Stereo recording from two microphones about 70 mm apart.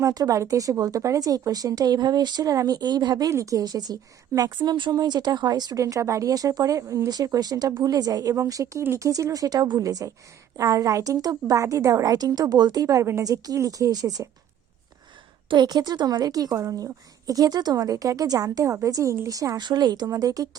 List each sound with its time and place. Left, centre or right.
0.0 s a woman's voice: right
3.2 s speech: right
3.6 s speech: right
4.4 s speech: right
5.7 s speech: right
7.3 s a woman's voice: right
15.5 s a woman's voice: right
20.1 s a woman's voice: right